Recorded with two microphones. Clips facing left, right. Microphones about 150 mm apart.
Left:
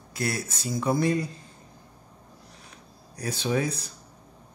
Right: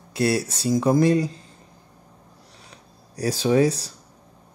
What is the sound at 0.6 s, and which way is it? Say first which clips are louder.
Speech: right 9 dB; 90° right.